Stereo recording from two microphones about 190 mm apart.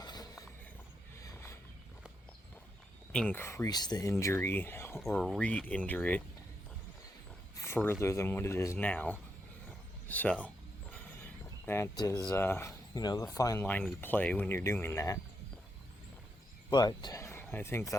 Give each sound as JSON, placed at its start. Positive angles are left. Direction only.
{"t": 0.0, "sound": "a sound", "side_deg": 20}
{"t": 3.1, "sound": "speech", "side_deg": 5}
{"t": 4.9, "sound": "speech", "side_deg": 0}
{"t": 7.5, "sound": "a sound", "side_deg": 15}
{"t": 8.0, "sound": "speech", "side_deg": 15}
{"t": 11.6, "sound": "speech", "side_deg": 15}
{"t": 16.7, "sound": "speech", "side_deg": 20}